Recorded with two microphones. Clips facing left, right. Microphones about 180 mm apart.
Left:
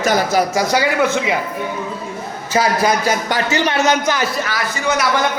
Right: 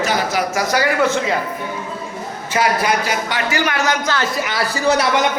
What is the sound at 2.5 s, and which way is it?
A man's voice, 35° left (ahead or behind).